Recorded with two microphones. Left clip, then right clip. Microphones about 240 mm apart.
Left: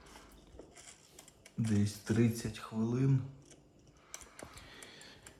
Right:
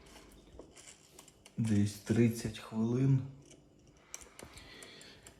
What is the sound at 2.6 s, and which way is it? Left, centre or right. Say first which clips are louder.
Speech: right 2 dB; left.